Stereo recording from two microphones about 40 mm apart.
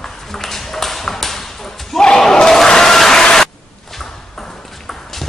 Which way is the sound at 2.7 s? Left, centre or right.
Centre.